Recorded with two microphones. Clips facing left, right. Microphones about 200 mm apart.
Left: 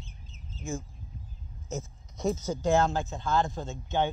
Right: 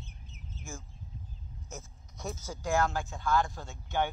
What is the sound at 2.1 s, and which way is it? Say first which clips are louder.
Speech: left 10 dB; 20° left (ahead or behind).